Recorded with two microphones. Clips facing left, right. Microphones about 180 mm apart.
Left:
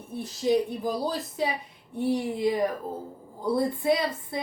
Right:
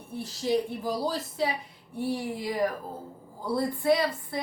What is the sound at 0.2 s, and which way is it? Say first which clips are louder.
Speech: left 3 dB; 20° left (ahead or behind).